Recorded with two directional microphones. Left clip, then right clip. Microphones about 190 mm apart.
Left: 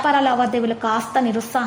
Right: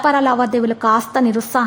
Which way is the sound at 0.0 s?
30° right (ahead or behind).